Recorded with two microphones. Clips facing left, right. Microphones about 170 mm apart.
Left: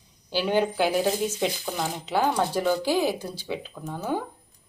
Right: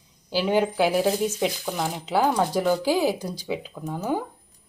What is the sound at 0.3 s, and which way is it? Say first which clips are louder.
Speech: right 2 dB; 5° right (ahead or behind).